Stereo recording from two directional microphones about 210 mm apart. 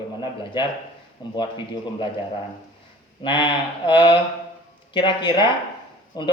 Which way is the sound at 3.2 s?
25° left (ahead or behind).